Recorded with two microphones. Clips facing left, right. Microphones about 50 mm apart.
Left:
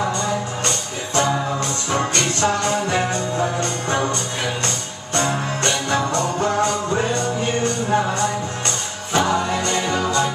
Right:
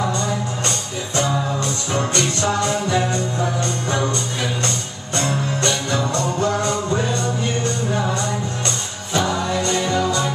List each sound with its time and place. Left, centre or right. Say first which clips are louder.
0.7 s music: even; left
5.1 s music: left 1 dB; left